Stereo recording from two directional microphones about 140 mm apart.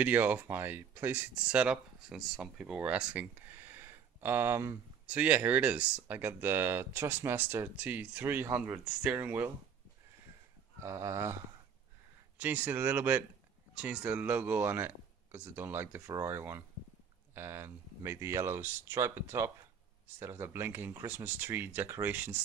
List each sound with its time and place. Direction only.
0.0 s speech: 10° right (ahead or behind)
10.8 s speech: 20° right (ahead or behind)